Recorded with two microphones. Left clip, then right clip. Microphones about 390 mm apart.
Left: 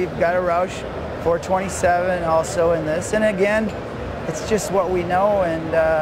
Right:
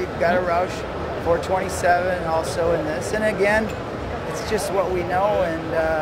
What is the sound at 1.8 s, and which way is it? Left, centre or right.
Speech, left.